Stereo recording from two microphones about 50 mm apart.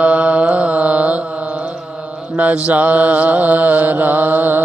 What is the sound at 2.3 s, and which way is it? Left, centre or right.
Mantra, right.